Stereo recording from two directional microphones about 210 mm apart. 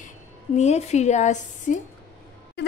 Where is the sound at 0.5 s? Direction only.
30° left (ahead or behind).